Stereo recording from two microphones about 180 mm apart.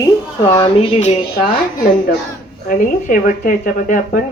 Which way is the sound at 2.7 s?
50° left (ahead or behind).